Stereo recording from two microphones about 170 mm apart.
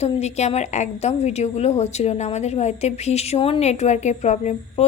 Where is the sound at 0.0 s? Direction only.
40° left (ahead or behind).